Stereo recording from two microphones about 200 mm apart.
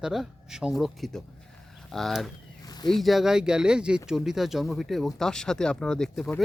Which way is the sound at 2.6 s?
20° left (ahead or behind).